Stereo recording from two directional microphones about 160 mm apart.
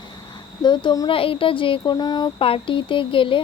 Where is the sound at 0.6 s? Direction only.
30° left (ahead or behind).